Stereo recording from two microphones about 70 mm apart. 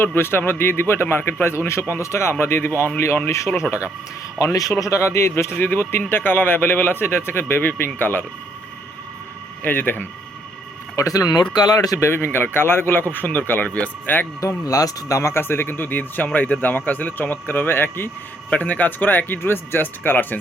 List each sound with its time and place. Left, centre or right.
0.0 s speech: left
3.2 s speech: left
4.5 s speech: left
9.6 s speech: left
10.9 s speech: left
11.9 s speech: left
14.6 s speech: left
18.5 s speech: left